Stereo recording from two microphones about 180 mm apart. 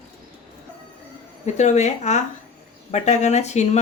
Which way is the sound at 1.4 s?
40° left (ahead or behind).